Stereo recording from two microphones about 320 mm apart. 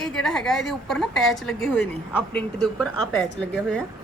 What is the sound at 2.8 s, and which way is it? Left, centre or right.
Speech, left.